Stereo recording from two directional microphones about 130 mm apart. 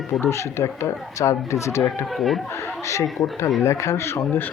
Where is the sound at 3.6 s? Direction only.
25° left (ahead or behind).